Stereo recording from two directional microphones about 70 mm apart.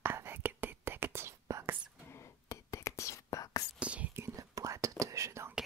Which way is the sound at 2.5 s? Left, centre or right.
Left.